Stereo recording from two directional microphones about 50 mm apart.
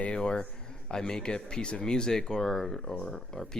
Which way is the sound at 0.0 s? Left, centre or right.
Centre.